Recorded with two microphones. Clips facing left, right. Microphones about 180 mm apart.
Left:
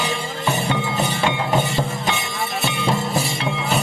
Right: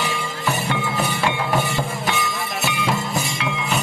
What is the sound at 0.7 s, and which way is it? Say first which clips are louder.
Music: left 1 dB; 20° left (ahead or behind).